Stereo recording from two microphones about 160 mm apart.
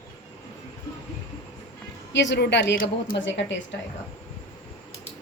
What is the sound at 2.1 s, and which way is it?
A woman's voice, 90° left.